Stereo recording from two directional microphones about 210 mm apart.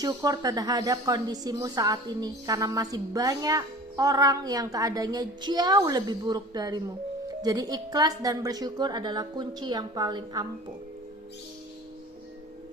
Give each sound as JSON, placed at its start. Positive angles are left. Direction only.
{"t": 0.0, "sound": "speech", "side_deg": -20}